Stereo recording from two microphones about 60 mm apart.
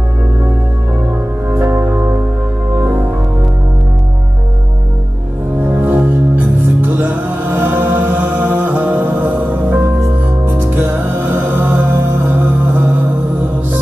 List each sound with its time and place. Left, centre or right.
1.5 s music: right
5.7 s music: right